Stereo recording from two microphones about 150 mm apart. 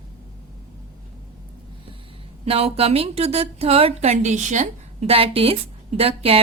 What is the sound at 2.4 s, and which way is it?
A woman's voice, 40° right (ahead or behind).